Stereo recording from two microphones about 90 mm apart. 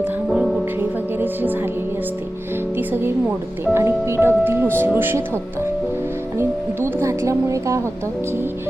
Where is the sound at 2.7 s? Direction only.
25° right (ahead or behind).